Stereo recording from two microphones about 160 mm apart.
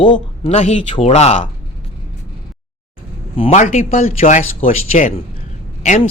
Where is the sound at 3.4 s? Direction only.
50° left (ahead or behind).